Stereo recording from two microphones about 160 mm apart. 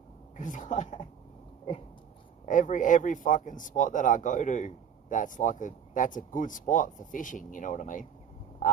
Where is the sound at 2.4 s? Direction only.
55° left (ahead or behind).